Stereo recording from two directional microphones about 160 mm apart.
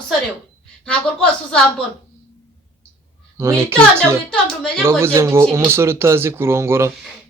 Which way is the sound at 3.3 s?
15° right (ahead or behind).